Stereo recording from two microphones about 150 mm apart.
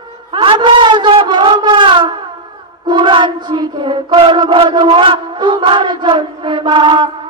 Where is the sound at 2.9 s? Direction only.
35° right (ahead or behind).